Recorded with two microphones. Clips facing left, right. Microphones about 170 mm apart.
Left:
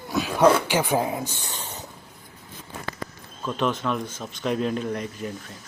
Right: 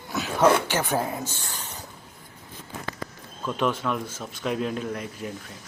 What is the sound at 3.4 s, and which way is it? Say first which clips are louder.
Speech: even; 10° right (ahead or behind).